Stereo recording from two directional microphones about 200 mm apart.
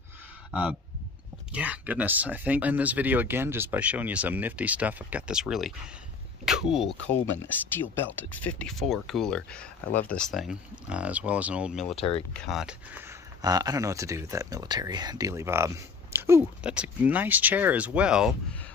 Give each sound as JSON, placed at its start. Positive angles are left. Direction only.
{"t": 1.5, "sound": "speech", "side_deg": -5}
{"t": 7.4, "sound": "speech", "side_deg": 10}
{"t": 11.9, "sound": "speech", "side_deg": 30}
{"t": 12.4, "sound": "speech", "side_deg": -5}
{"t": 13.4, "sound": "speech", "side_deg": -20}